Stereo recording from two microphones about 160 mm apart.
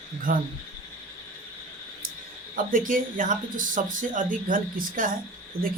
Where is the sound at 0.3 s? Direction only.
60° right (ahead or behind).